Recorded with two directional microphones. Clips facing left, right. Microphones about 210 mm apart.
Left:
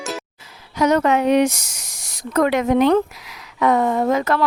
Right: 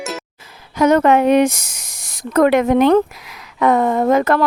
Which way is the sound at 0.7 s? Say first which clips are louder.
Right 4 dB; 55° right (ahead or behind).